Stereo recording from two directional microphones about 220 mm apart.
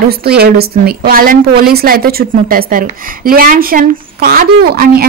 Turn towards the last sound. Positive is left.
turn(degrees=-40)  # may be behind; listen again after turning